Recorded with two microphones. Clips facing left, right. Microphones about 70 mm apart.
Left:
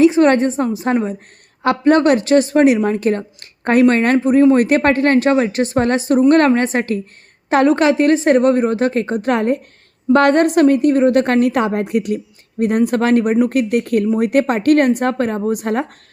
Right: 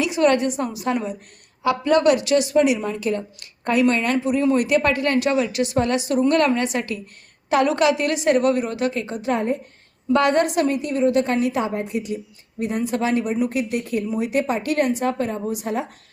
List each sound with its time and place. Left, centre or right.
0.0 s a woman's voice: left
1.6 s a woman's voice: left
9.3 s a woman's voice: left
10.1 s a woman's voice: left